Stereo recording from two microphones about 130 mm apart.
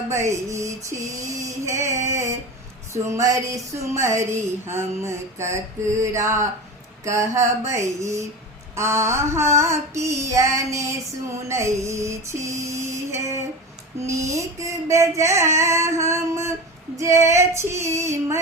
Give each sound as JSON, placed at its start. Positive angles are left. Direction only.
{"t": 0.1, "sound": "speech", "side_deg": -20}
{"t": 2.0, "sound": "a sound", "side_deg": -20}
{"t": 2.9, "sound": "speech", "side_deg": -25}